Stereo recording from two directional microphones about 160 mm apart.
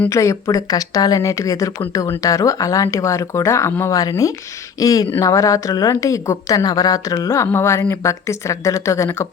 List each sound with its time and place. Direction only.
0.0 s a woman's voice: 20° left (ahead or behind)